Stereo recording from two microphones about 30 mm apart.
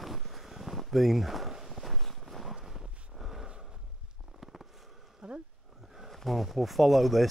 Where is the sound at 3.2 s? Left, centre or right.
Centre.